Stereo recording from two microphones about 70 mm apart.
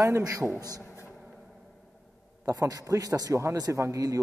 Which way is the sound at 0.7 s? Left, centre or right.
Left.